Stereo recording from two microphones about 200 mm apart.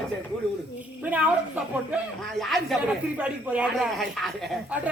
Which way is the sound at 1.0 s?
5° right (ahead or behind).